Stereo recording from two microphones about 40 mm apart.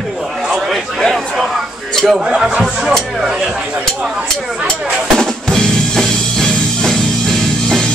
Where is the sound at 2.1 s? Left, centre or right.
Centre.